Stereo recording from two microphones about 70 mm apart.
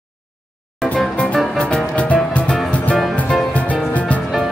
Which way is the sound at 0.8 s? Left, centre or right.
Centre.